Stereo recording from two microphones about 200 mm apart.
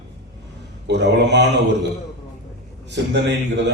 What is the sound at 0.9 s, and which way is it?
Speech, 60° right (ahead or behind).